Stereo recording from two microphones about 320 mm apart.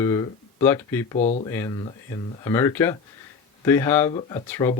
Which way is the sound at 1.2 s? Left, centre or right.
Left.